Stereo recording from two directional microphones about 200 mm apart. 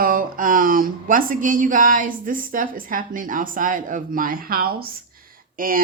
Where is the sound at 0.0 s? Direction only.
45° right (ahead or behind).